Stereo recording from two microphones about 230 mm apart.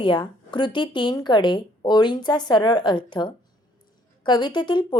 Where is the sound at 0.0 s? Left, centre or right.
Left.